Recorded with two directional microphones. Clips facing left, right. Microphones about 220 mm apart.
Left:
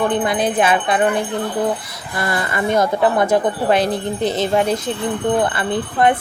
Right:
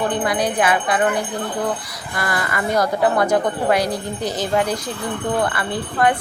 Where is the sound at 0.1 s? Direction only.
25° left (ahead or behind).